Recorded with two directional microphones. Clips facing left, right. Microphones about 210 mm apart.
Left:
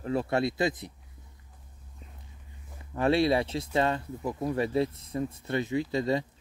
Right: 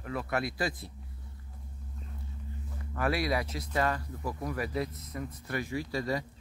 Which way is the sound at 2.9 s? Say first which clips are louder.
Left 6 dB; 25° left (ahead or behind).